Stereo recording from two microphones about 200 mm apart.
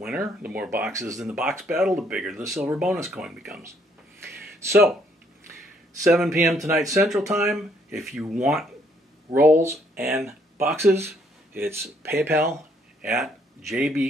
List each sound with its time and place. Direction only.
0.0 s speech: 5° right (ahead or behind)
1.2 s speech: 5° right (ahead or behind)
6.0 s speech: 5° right (ahead or behind)
6.7 s speech: 15° right (ahead or behind)
7.1 s speech: centre (ahead or behind)
13.0 s speech: centre (ahead or behind)